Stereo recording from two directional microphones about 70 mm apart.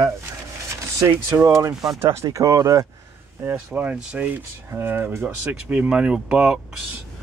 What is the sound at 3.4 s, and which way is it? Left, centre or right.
Speech, right.